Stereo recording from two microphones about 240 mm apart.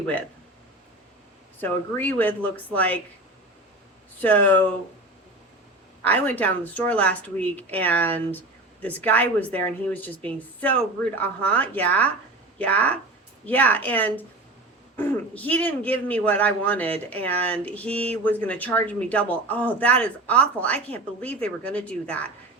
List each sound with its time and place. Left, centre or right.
1.6 s a man's voice: centre
4.2 s a man's voice: centre
6.0 s a man's voice: centre